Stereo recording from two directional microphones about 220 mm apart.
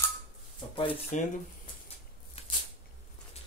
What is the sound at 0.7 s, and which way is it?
Speech, 35° left (ahead or behind).